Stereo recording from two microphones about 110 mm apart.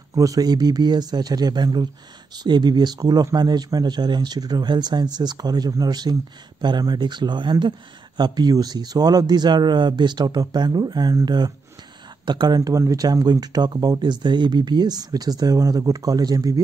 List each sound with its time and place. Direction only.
0.1 s speech: 30° right (ahead or behind)